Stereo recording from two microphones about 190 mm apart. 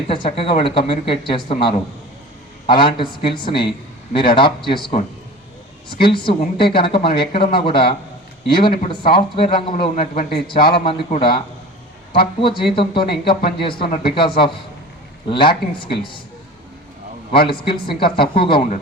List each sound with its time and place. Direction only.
0.1 s a man's voice: 30° left (ahead or behind)
17.3 s a man's voice: 25° left (ahead or behind)